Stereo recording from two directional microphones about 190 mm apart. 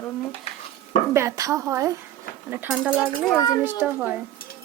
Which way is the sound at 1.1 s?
15° right (ahead or behind).